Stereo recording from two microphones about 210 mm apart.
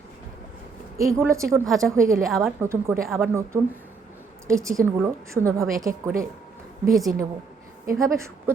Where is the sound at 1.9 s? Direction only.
15° right (ahead or behind).